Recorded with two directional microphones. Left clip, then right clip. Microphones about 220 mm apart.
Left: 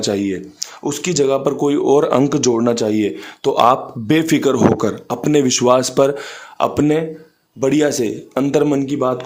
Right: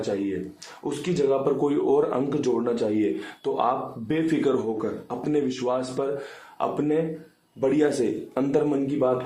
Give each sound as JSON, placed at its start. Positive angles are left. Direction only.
{"t": 0.1, "sound": "speech", "side_deg": 50}
{"t": 1.6, "sound": "speech", "side_deg": 35}